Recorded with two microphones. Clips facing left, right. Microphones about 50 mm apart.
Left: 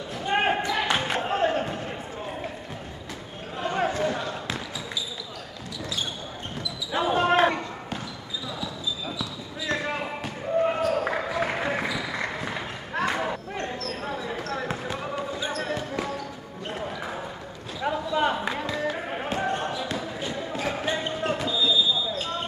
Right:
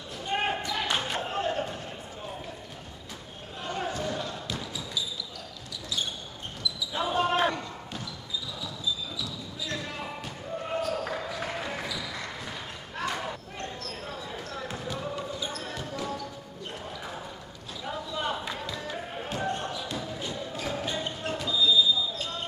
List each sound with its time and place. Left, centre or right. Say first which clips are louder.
0.3 s basketball bounce: left 5 dB; left
3.7 s basketball bounce: left 6 dB; left
6.9 s basketball bounce: left 5 dB; left
9.2 s basketball bounce: left 4 dB; left
17.8 s a sound: left 8 dB; left
18.3 s basketball bounce: left 6 dB; left